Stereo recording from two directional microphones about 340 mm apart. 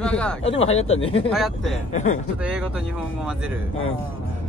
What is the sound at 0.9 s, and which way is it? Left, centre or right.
Speech, centre.